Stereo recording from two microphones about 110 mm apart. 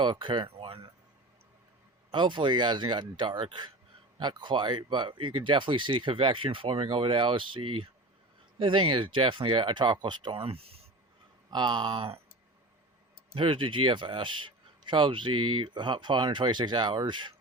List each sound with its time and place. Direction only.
0.0 s speech: 50° right (ahead or behind)
2.1 s speech: 45° right (ahead or behind); by 10.8 s 65° right (ahead or behind)
11.5 s speech: 45° right (ahead or behind)
13.3 s speech: 50° right (ahead or behind)